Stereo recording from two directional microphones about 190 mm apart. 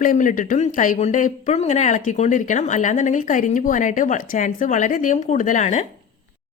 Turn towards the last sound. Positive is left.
turn(degrees=40)  # may be behind; listen again after turning